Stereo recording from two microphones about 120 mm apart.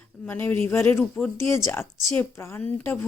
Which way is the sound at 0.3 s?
20° left (ahead or behind).